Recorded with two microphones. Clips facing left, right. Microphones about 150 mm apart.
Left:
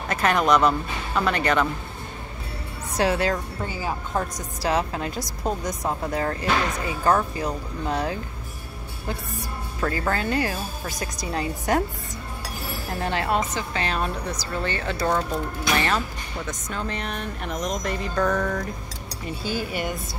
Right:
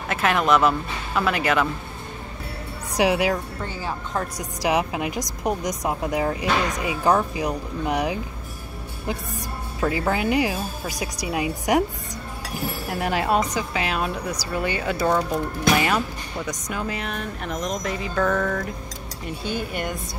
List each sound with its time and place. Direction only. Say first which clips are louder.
0.1 s speech: even; centre (ahead or behind)
3.0 s speech: right 2 dB; 15° right (ahead or behind)
3.6 s speech: left 1 dB; 10° left (ahead or behind)
4.4 s speech: right 4 dB; 15° right (ahead or behind)
9.8 s speech: right 2 dB; 15° right (ahead or behind)
12.9 s speech: right 2 dB; 10° right (ahead or behind)